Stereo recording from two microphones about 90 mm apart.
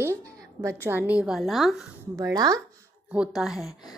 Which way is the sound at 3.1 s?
5° right (ahead or behind).